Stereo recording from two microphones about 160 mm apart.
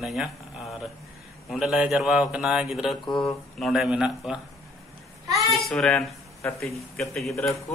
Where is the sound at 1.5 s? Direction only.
5° right (ahead or behind).